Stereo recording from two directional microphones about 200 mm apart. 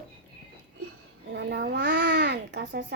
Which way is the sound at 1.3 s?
60° right (ahead or behind).